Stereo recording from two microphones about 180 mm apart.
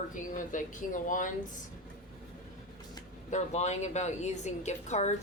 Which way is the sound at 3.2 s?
40° left (ahead or behind).